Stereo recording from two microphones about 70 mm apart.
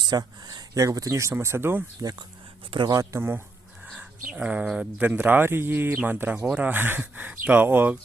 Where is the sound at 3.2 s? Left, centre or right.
Right.